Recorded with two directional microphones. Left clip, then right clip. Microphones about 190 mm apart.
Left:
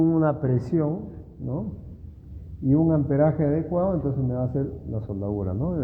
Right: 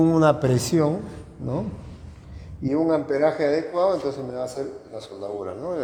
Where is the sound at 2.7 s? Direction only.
15° right (ahead or behind).